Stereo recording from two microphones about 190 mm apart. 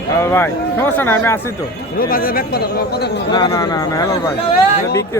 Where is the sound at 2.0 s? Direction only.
50° left (ahead or behind).